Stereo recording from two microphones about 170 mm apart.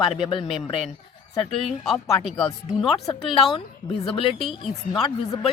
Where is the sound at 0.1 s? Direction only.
30° left (ahead or behind).